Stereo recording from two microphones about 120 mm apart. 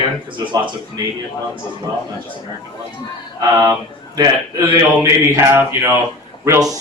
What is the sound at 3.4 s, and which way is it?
A man's voice, 30° right (ahead or behind).